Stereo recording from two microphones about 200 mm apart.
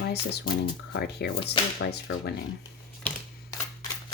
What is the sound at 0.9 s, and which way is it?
Speech, 55° left (ahead or behind).